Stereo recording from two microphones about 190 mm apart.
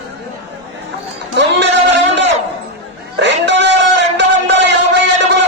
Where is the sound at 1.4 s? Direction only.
65° right (ahead or behind).